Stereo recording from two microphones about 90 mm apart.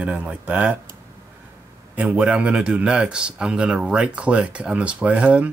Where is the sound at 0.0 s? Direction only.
15° right (ahead or behind).